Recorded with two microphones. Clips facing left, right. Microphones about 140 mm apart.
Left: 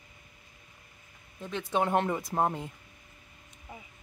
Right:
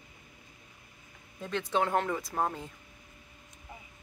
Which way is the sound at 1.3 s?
Centre (ahead or behind).